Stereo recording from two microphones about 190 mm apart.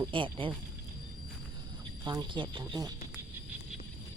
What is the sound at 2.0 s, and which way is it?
Speech, 25° right (ahead or behind).